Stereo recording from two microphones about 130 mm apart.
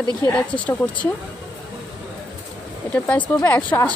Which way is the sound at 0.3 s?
10° left (ahead or behind).